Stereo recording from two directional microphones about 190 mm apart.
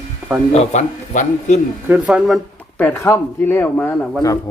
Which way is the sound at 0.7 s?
40° left (ahead or behind).